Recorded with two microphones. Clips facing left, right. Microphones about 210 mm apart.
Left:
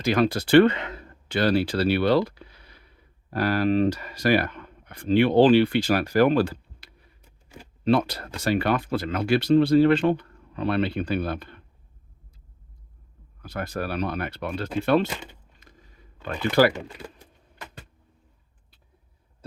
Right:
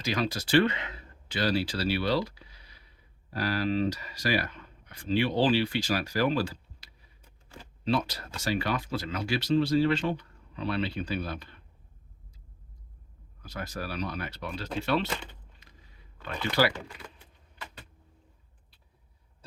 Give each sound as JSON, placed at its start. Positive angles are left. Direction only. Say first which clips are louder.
{"t": 0.0, "sound": "speech", "louder": "left 8 dB", "side_deg": 55}
{"t": 13.4, "sound": "speech", "louder": "left 7 dB", "side_deg": 55}
{"t": 15.6, "sound": "a sound", "louder": "left 5 dB", "side_deg": 45}
{"t": 16.2, "sound": "speech", "louder": "left 7 dB", "side_deg": 50}
{"t": 16.7, "sound": "speech", "louder": "left 6 dB", "side_deg": 25}
{"t": 17.2, "sound": "keys jangling", "louder": "left 3 dB", "side_deg": 45}